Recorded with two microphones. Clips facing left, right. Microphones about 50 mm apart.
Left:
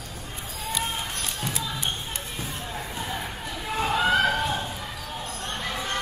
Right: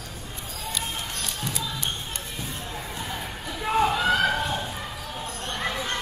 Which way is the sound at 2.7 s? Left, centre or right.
Centre.